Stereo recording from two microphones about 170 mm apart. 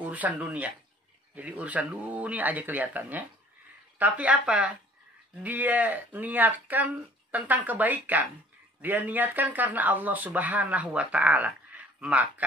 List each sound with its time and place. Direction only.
0.0 s speech: 10° right (ahead or behind)